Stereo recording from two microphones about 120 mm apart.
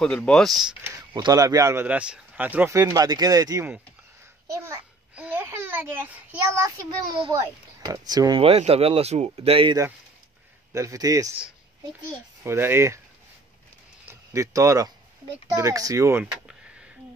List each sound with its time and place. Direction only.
0.0 s speech: 5° left (ahead or behind)
1.1 s speech: 35° right (ahead or behind)
1.9 s speech: 10° right (ahead or behind)
2.7 s speech: 30° right (ahead or behind)
5.1 s a sound: 15° right (ahead or behind)
7.3 s speech: 30° right (ahead or behind)
8.4 s speech: 55° right (ahead or behind)
10.7 s speech: 25° right (ahead or behind)
12.4 s speech: 20° right (ahead or behind)
14.3 s speech: 25° right (ahead or behind)